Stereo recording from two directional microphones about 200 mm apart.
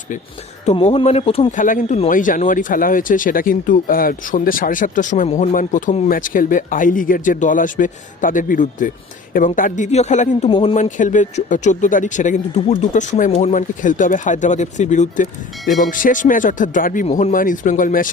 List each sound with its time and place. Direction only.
0.6 s speech: 30° left (ahead or behind)